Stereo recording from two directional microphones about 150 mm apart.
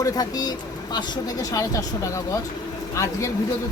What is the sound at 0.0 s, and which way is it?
Speech, 25° left (ahead or behind).